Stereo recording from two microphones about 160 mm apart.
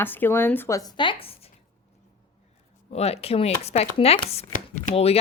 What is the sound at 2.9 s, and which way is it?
Speech, 40° left (ahead or behind).